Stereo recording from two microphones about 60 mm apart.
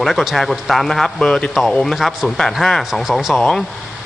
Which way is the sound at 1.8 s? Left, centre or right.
Centre.